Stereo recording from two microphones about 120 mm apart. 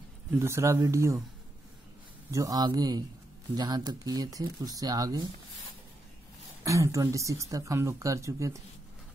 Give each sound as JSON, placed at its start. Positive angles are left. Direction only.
{"t": 0.3, "sound": "speech", "side_deg": -20}
{"t": 2.3, "sound": "speech", "side_deg": -30}
{"t": 6.6, "sound": "speech", "side_deg": -25}